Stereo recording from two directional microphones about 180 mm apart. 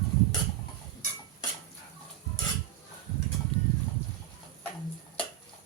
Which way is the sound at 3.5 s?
30° right (ahead or behind).